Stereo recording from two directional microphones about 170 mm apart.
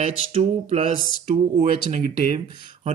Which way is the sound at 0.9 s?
50° right (ahead or behind).